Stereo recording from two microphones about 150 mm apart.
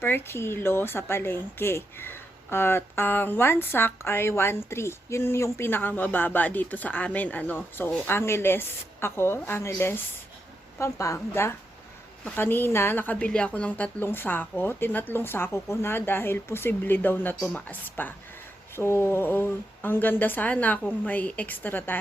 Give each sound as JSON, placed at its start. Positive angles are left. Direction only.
{"t": 0.0, "sound": "a woman's voice", "side_deg": 15}